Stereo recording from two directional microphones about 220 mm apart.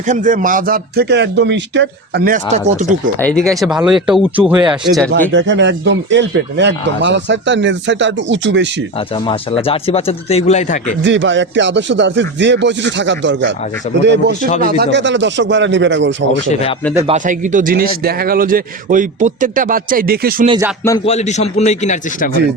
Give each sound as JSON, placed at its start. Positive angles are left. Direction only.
{"t": 0.1, "sound": "a man's voice", "side_deg": -35}
{"t": 3.2, "sound": "speech", "side_deg": 5}
{"t": 5.3, "sound": "speech", "side_deg": -55}
{"t": 9.0, "sound": "speech", "side_deg": 25}
{"t": 11.0, "sound": "speech", "side_deg": -55}
{"t": 16.5, "sound": "speech", "side_deg": 30}
{"t": 17.1, "sound": "a man's voice", "side_deg": -35}
{"t": 21.0, "sound": "a man's voice", "side_deg": 30}